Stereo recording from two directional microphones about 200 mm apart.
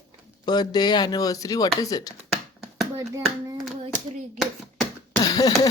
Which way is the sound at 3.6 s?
Centre (ahead or behind).